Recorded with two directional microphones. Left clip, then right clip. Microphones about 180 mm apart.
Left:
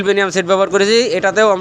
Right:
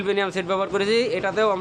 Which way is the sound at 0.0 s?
30° left (ahead or behind).